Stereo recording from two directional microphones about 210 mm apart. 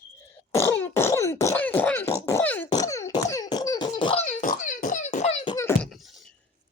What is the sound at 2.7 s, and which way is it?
Cough, 15° left (ahead or behind).